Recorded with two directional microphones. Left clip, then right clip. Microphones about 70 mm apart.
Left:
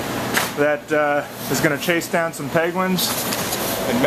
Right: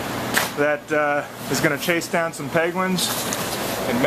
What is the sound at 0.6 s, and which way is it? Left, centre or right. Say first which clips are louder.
Speech: left 3 dB; centre.